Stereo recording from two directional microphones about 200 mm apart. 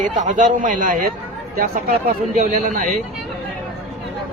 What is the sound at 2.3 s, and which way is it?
Speech, 40° right (ahead or behind).